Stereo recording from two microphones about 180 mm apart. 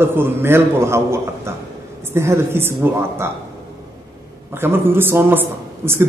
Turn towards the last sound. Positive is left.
turn(degrees=-10)  # may be behind; listen again after turning